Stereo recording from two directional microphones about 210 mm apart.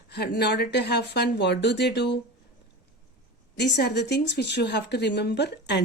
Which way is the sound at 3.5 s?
55° left (ahead or behind).